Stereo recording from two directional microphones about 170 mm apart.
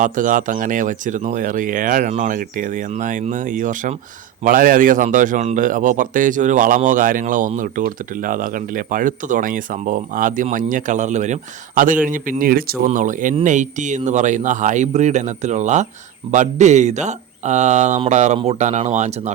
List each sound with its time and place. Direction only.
0.0 s speech: 50° right (ahead or behind)